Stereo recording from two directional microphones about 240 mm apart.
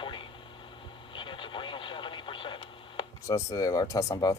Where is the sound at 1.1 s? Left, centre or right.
Left.